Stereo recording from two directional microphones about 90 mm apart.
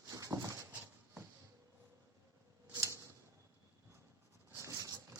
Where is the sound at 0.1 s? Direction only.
40° right (ahead or behind).